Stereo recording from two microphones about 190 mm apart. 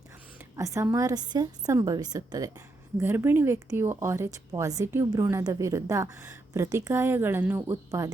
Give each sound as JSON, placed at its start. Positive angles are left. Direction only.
{"t": 0.5, "sound": "a woman's voice", "side_deg": -15}